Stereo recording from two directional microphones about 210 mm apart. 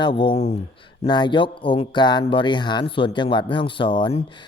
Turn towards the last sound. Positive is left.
turn(degrees=25)  # may be behind; listen again after turning